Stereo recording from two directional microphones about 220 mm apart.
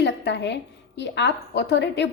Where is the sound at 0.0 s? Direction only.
50° left (ahead or behind).